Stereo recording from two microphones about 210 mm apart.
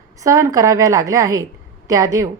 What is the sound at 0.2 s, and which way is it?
A woman's voice, 15° right (ahead or behind).